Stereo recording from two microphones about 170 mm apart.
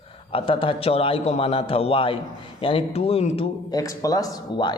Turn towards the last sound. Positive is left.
turn(degrees=25)  # may be behind; listen again after turning